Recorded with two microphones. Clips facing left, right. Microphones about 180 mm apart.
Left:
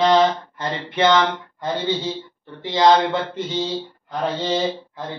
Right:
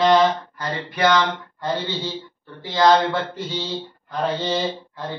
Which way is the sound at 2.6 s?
20° left (ahead or behind).